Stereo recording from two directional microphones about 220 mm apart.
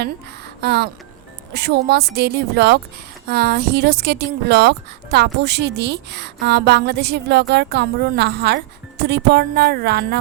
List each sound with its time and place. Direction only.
0.0 s a woman's voice: 50° right (ahead or behind)